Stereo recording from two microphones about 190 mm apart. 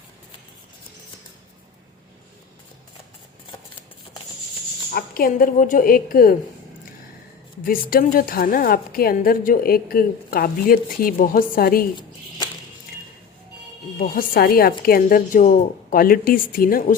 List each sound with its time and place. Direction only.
4.9 s a woman's voice: 50° left (ahead or behind)
7.6 s a woman's voice: 50° left (ahead or behind)
14.0 s a woman's voice: 50° left (ahead or behind)